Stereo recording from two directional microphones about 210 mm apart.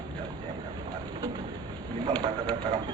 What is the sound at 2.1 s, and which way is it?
Speech, 20° right (ahead or behind).